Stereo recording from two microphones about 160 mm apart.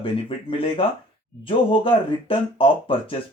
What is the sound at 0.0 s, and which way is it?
Speech, 35° left (ahead or behind).